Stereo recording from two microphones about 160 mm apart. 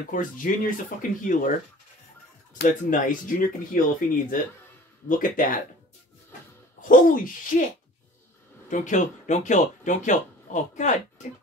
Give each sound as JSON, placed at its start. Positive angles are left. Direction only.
{"t": 0.0, "sound": "speech", "side_deg": 55}
{"t": 2.9, "sound": "speech", "side_deg": 55}
{"t": 6.8, "sound": "speech", "side_deg": 60}
{"t": 8.6, "sound": "speech", "side_deg": 50}